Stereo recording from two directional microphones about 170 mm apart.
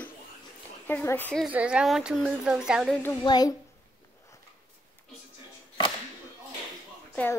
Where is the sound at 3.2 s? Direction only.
25° left (ahead or behind).